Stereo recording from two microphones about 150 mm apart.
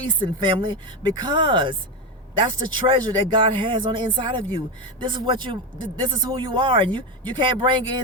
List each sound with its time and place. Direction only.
0.2 s speech: 30° right (ahead or behind)